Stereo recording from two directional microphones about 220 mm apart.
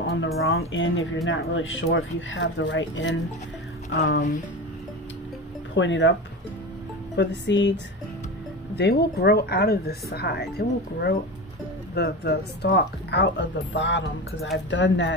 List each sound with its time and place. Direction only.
0.0 s a sound: 45° left (ahead or behind)
0.5 s speech: 65° left (ahead or behind)
5.8 s speech: 55° left (ahead or behind)
7.2 s speech: 55° left (ahead or behind)